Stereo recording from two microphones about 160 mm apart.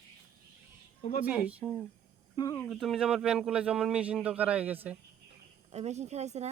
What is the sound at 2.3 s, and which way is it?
Speech, 25° left (ahead or behind).